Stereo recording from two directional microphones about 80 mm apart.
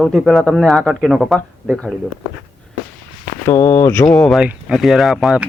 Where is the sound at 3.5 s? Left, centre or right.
Left.